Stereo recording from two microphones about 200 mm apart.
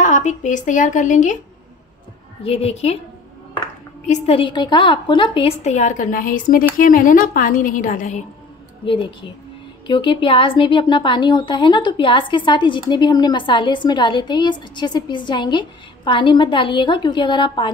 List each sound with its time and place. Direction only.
0.0 s a woman's voice: 35° left (ahead or behind)
2.4 s a woman's voice: 30° left (ahead or behind)
4.1 s a woman's voice: 30° left (ahead or behind)
8.8 s a woman's voice: 25° left (ahead or behind)